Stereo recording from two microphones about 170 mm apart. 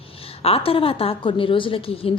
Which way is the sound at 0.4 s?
35° left (ahead or behind).